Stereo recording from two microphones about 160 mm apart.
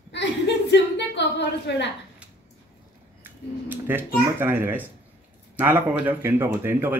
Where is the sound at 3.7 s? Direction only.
15° right (ahead or behind).